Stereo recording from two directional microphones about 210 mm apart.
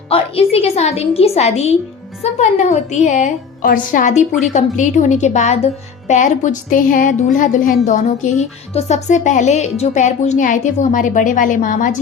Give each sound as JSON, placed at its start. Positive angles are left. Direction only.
{"t": 0.1, "sound": "a woman's voice", "side_deg": 25}